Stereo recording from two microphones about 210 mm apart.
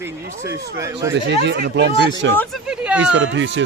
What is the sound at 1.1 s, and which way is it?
Speech, 55° right (ahead or behind).